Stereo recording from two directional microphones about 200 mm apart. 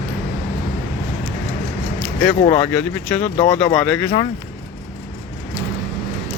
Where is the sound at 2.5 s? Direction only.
10° left (ahead or behind).